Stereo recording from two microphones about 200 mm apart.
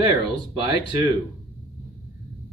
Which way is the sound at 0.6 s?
20° right (ahead or behind).